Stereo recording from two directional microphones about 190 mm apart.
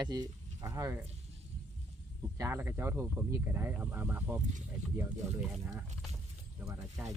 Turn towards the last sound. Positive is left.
turn(degrees=-15)  # may be behind; listen again after turning